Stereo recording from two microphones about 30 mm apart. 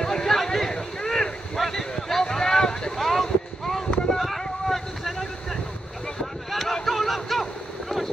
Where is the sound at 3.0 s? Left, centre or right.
Centre.